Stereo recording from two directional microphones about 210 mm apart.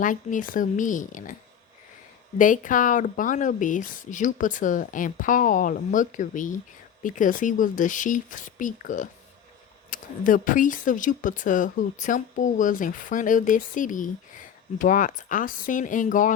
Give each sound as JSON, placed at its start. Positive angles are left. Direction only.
{"t": 0.0, "sound": "speech", "side_deg": 40}
{"t": 2.4, "sound": "speech", "side_deg": 40}